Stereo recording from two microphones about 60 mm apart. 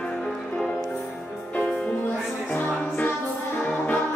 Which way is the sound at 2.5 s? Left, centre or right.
Left.